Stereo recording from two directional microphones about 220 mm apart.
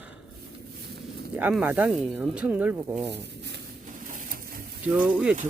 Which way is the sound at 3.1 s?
50° right (ahead or behind).